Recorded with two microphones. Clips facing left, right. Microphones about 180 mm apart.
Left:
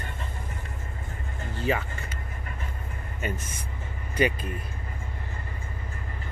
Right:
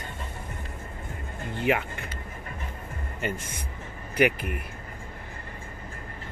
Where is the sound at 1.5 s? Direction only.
20° right (ahead or behind).